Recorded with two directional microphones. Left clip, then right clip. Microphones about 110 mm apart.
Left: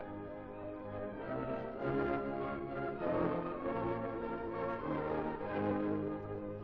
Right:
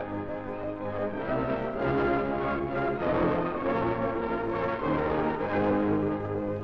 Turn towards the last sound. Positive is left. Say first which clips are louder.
# right 10 dB
turn(degrees=30)  # may be behind; listen again after turning